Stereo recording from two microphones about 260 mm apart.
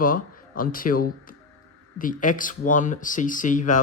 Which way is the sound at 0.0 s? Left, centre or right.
Left.